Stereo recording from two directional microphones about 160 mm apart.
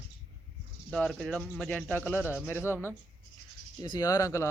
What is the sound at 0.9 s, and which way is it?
Speech, 5° left (ahead or behind).